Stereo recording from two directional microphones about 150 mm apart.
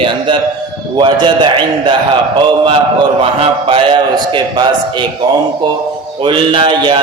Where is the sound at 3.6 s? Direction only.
35° right (ahead or behind).